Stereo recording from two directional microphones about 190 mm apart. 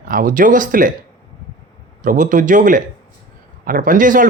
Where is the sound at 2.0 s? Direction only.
45° right (ahead or behind).